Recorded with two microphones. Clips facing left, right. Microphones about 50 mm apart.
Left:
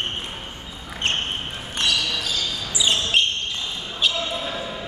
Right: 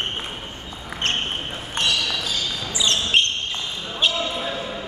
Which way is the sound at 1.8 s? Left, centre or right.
Right.